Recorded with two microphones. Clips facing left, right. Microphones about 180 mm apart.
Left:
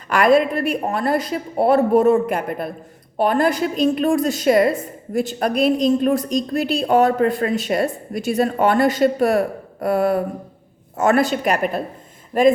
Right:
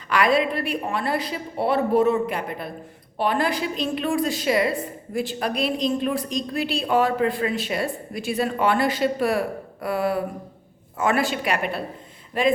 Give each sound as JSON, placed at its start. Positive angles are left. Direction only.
{"t": 0.1, "sound": "a woman's voice", "side_deg": 45}